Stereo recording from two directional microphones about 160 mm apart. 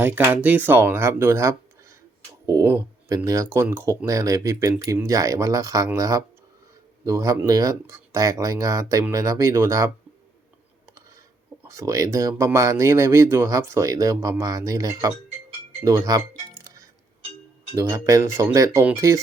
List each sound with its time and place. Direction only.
0.0 s speech: 15° right (ahead or behind)
11.7 s speech: 20° right (ahead or behind)
17.7 s speech: 20° right (ahead or behind)